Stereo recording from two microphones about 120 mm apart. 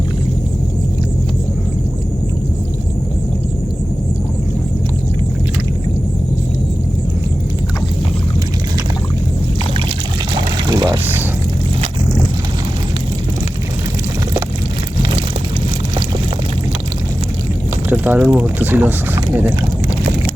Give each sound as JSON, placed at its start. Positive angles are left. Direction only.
{"t": 10.7, "sound": "vehicle", "side_deg": -35}
{"t": 17.8, "sound": "a sound", "side_deg": -15}
{"t": 18.2, "sound": "speech", "side_deg": -10}